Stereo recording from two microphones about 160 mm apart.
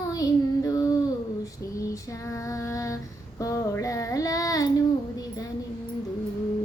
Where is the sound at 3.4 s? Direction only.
20° left (ahead or behind).